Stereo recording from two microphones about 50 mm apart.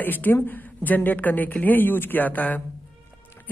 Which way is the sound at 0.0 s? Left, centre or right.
Left.